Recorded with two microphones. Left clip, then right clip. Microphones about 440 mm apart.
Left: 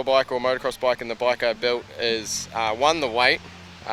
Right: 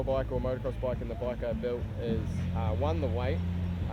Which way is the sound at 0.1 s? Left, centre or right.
Left.